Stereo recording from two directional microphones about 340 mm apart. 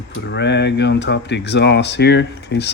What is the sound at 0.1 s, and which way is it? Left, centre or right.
Speech, left.